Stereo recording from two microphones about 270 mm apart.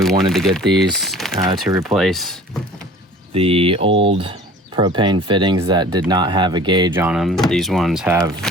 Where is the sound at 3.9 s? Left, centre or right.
Right.